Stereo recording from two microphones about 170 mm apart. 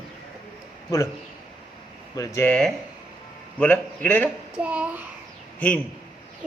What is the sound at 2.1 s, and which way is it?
Speech, 20° left (ahead or behind).